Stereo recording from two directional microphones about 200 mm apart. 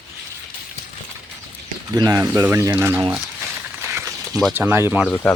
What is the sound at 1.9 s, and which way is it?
Speech, 15° right (ahead or behind).